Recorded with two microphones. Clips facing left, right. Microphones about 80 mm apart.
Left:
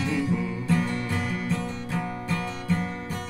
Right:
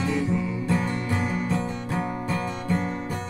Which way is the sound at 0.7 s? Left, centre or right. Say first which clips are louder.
Left 1 dB; right.